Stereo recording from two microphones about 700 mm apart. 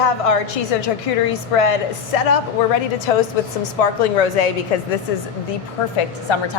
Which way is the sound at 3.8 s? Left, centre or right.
Left.